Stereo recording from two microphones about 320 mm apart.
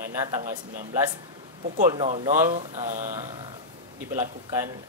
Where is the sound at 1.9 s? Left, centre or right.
Centre.